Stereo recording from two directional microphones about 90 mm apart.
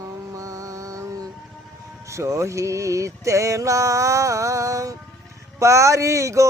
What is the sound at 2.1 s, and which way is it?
Female singing, 35° right (ahead or behind).